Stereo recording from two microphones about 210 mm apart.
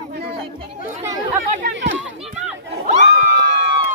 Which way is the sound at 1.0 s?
15° right (ahead or behind).